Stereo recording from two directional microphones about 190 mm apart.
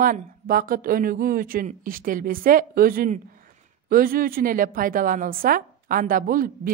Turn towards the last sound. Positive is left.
turn(degrees=-45)  # may be behind; listen again after turning